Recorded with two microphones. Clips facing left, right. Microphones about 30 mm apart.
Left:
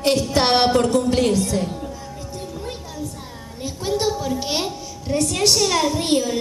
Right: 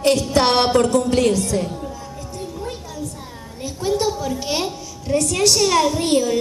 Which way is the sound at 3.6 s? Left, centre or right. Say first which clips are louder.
Right 2 dB; centre.